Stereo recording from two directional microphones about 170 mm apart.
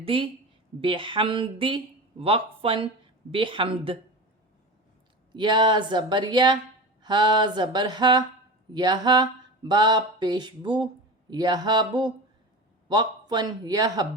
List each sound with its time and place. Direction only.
0.0 s speech: 30° right (ahead or behind)
3.3 s mantra: 30° right (ahead or behind)
5.3 s mantra: 25° right (ahead or behind)